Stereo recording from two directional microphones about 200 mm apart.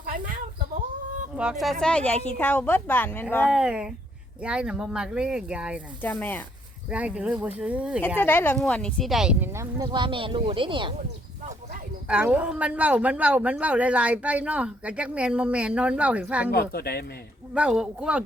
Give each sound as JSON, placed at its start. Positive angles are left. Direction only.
{"t": 1.4, "sound": "a woman's voice", "side_deg": -5}
{"t": 3.5, "sound": "speech", "side_deg": -5}
{"t": 6.0, "sound": "a woman's voice", "side_deg": 10}
{"t": 6.9, "sound": "speech", "side_deg": -5}
{"t": 8.2, "sound": "speech", "side_deg": 10}
{"t": 12.0, "sound": "speech", "side_deg": -5}
{"t": 16.5, "sound": "speech", "side_deg": 50}
{"t": 17.5, "sound": "speech", "side_deg": -5}